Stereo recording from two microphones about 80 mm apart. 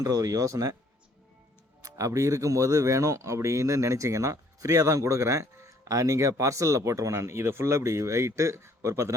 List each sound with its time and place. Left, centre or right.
0.0 s speech: right
1.8 s speech: right